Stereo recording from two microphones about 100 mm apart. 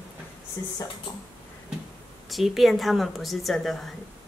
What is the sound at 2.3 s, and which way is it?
A woman's voice, centre (ahead or behind).